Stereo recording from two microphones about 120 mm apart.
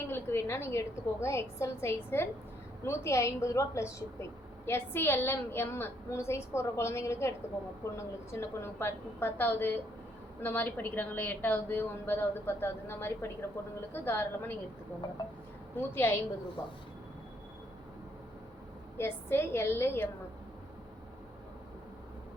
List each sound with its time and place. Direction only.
0.1 s a woman's voice: 20° left (ahead or behind)
16.0 s a woman's voice: 20° left (ahead or behind)
18.9 s a woman's voice: 20° left (ahead or behind)